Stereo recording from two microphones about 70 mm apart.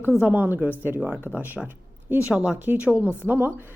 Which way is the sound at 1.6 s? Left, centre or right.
Right.